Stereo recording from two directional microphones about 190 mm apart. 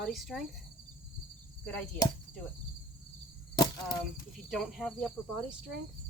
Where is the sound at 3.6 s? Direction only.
20° left (ahead or behind).